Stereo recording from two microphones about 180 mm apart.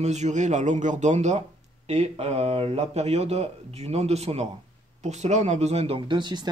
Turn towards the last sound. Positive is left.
turn(degrees=-25)  # may be behind; listen again after turning